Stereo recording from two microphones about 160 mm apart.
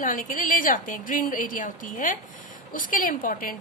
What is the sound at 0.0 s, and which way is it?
A woman's voice, 55° left (ahead or behind).